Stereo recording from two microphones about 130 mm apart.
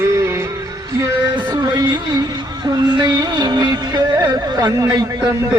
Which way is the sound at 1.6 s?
35° right (ahead or behind).